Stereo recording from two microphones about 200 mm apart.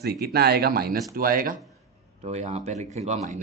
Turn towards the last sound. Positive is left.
turn(degrees=-35)  # may be behind; listen again after turning